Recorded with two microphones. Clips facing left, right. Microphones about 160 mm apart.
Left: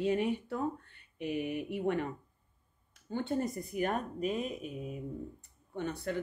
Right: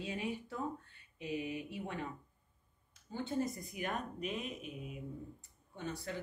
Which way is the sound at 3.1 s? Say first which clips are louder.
Left 4 dB; 60° left (ahead or behind).